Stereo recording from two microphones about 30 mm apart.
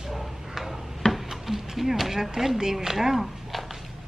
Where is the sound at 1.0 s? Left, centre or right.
Left.